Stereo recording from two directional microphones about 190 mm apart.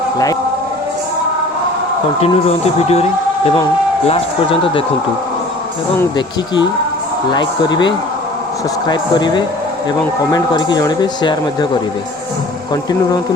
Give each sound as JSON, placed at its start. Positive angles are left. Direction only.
{"t": 2.2, "sound": "speech", "side_deg": 35}
{"t": 7.3, "sound": "speech", "side_deg": 25}